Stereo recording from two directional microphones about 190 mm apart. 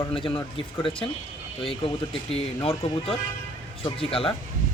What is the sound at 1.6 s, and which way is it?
Speech, 30° left (ahead or behind).